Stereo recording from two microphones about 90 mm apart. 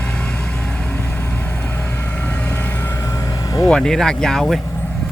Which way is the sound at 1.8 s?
15° left (ahead or behind).